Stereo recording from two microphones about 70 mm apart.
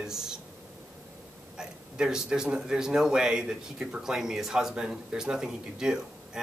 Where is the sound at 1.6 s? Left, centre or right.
Centre.